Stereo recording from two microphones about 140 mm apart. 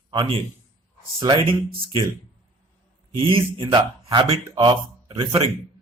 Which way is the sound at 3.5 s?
35° right (ahead or behind).